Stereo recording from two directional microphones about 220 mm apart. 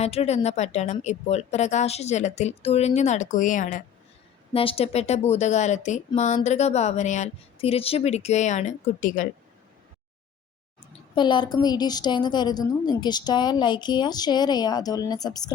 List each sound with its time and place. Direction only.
0.0 s speech: 30° left (ahead or behind)
4.5 s a woman's voice: 25° left (ahead or behind)
11.1 s a woman's voice: 20° left (ahead or behind)